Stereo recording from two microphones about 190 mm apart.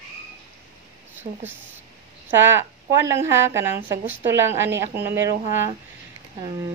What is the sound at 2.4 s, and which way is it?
Speech, 15° right (ahead or behind).